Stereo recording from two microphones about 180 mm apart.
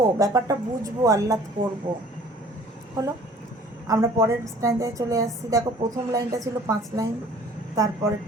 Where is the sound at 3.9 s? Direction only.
15° right (ahead or behind).